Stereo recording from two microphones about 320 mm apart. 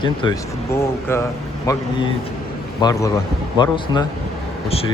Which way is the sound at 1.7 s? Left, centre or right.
Centre.